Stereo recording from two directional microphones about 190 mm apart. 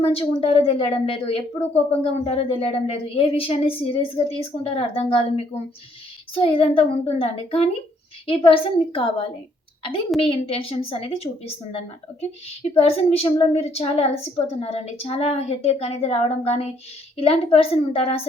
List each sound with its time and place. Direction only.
0.0 s a woman's voice: 30° left (ahead or behind)